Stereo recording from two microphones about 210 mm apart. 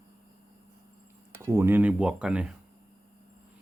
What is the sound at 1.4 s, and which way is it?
Speech, 10° right (ahead or behind).